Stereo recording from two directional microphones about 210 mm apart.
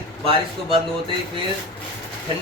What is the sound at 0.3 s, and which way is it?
Speech, 25° right (ahead or behind).